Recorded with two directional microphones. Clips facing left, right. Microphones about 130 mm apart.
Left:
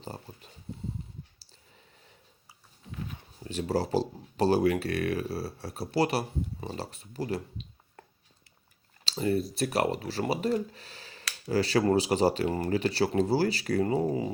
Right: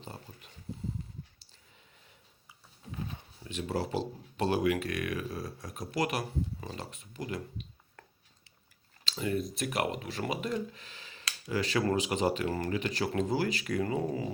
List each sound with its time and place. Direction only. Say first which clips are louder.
0.0 s speech: left 4 dB; 35° left (ahead or behind)
1.4 s a sound: left 4 dB; 35° left (ahead or behind)
3.4 s speech: left 5 dB; 35° left (ahead or behind)
9.0 s speech: left 4 dB; 35° left (ahead or behind)
12.5 s speech: left 3 dB; 25° left (ahead or behind)
12.7 s speech: left 5 dB; 35° left (ahead or behind)